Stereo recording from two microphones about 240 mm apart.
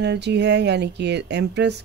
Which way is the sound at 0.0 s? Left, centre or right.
Right.